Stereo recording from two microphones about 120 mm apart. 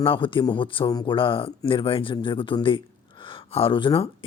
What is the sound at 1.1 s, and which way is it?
Speech, 45° left (ahead or behind).